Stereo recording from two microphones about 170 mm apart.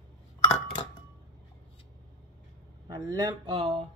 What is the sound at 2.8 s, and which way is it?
Speech, 25° right (ahead or behind).